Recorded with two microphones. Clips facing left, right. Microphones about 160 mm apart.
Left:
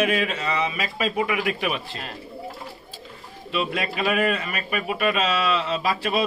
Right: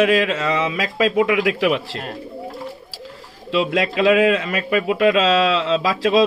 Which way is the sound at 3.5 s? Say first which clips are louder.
Right 7 dB; 90° right.